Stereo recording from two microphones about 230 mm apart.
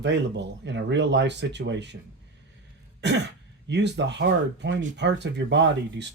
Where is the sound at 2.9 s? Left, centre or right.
Right.